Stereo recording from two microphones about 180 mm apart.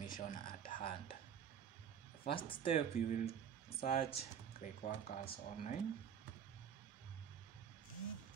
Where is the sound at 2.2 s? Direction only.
30° left (ahead or behind).